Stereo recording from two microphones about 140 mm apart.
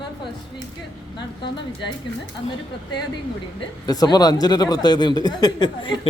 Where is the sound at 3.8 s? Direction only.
30° left (ahead or behind).